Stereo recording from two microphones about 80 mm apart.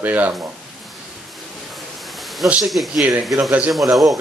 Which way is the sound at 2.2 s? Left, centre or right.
Centre.